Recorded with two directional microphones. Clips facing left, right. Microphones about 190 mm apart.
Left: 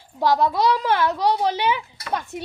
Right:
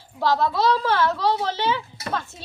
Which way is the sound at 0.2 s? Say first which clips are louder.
Left 2 dB; 15° left (ahead or behind).